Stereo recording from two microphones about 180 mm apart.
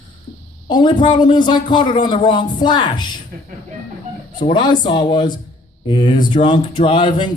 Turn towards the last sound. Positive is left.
turn(degrees=25)  # may be behind; listen again after turning